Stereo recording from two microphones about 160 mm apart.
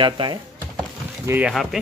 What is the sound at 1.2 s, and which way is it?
Speech, 10° right (ahead or behind).